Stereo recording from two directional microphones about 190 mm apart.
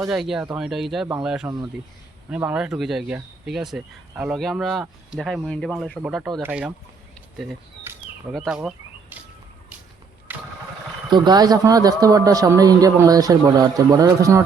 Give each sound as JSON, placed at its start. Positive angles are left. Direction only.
{"t": 0.1, "sound": "speech", "side_deg": -5}
{"t": 7.9, "sound": "a sound", "side_deg": -5}
{"t": 10.3, "sound": "vehicle", "side_deg": -10}
{"t": 11.1, "sound": "a man's voice", "side_deg": -20}